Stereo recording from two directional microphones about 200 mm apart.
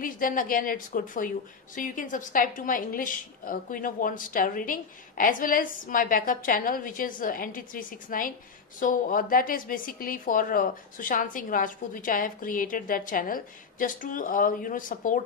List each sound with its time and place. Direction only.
0.0 s a woman's voice: 45° left (ahead or behind)